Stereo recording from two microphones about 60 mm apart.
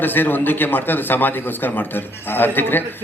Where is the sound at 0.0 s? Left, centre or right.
Left.